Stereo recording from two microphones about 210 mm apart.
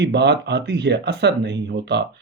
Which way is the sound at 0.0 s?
55° right (ahead or behind).